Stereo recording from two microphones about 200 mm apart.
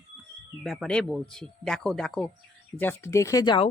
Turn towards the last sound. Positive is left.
turn(degrees=20)  # may be behind; listen again after turning